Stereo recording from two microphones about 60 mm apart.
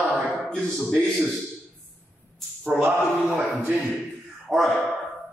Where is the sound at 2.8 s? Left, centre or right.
Right.